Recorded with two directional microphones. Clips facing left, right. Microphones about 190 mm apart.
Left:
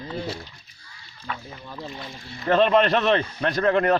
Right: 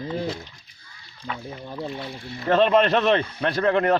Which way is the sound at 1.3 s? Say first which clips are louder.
Right 1 dB; 15° right (ahead or behind).